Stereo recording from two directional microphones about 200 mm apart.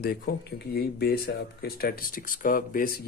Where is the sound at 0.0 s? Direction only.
50° left (ahead or behind).